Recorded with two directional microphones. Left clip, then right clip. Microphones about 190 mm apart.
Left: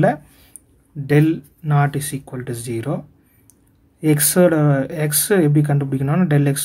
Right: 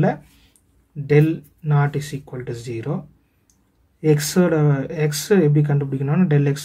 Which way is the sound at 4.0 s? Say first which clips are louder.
Left 3 dB; 25° left (ahead or behind).